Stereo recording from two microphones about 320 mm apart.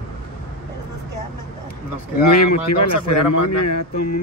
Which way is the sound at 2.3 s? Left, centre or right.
Left.